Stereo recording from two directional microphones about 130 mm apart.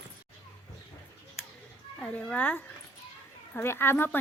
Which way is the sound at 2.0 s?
10° left (ahead or behind).